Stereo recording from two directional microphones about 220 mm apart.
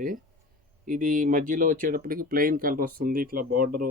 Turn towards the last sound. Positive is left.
turn(degrees=-40)  # may be behind; listen again after turning